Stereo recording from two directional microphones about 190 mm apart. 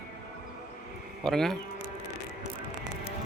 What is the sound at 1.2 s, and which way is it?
Speech, centre (ahead or behind).